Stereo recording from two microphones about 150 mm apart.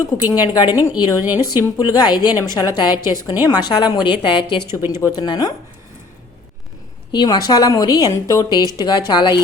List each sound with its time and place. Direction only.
0.0 s a woman's voice: 25° left (ahead or behind)
4.7 s speech: 20° right (ahead or behind)
4.9 s a woman's voice: 25° left (ahead or behind)
7.1 s a woman's voice: 30° left (ahead or behind)